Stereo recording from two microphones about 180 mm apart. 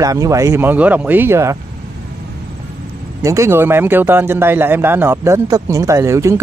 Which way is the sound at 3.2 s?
15° right (ahead or behind).